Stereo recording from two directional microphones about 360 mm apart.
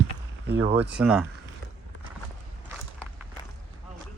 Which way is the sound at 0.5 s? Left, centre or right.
Centre.